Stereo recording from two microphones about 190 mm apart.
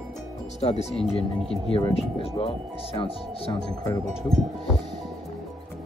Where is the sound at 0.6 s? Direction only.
35° left (ahead or behind).